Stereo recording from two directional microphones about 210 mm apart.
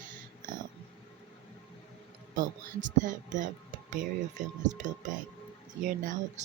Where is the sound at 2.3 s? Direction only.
40° right (ahead or behind).